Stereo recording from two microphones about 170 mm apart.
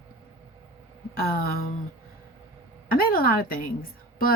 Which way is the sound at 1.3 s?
55° left (ahead or behind).